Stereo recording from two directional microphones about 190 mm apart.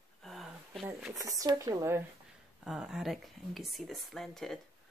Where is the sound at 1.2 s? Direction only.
20° right (ahead or behind).